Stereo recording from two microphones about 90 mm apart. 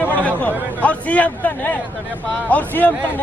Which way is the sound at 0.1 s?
15° left (ahead or behind).